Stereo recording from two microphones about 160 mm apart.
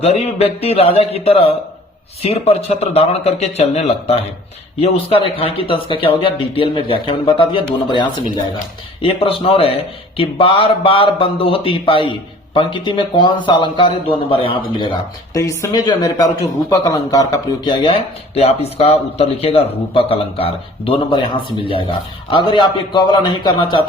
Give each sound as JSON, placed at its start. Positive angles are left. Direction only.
{"t": 0.0, "sound": "speech", "side_deg": 40}
{"t": 15.4, "sound": "a man's voice", "side_deg": 20}